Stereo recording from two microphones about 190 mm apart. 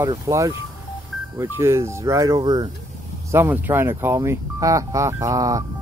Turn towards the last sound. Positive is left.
turn(degrees=-15)  # may be behind; listen again after turning